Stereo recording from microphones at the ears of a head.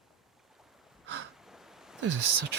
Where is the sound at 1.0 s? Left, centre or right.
Right.